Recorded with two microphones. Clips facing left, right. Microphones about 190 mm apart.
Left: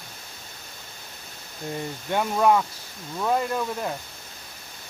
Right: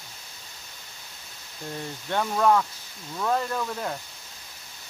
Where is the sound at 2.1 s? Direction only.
10° left (ahead or behind).